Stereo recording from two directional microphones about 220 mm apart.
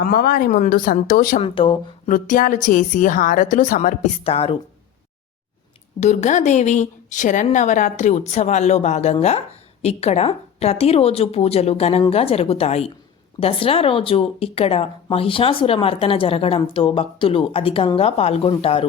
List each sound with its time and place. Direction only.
0.0 s a woman's voice: 40° left (ahead or behind)
1.4 s speech: 25° left (ahead or behind)
2.0 s a woman's voice: 35° left (ahead or behind)
6.0 s a woman's voice: 30° left (ahead or behind)